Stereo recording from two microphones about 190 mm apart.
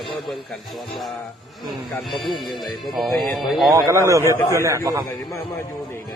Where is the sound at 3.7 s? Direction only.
20° right (ahead or behind).